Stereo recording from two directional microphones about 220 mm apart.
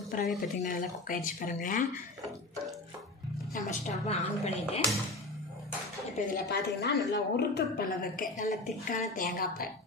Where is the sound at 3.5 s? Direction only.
30° left (ahead or behind).